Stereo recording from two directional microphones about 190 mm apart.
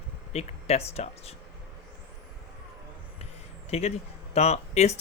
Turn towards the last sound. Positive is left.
turn(degrees=35)  # may be behind; listen again after turning